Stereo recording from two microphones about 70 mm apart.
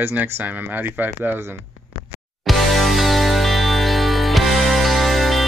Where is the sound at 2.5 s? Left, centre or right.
Centre.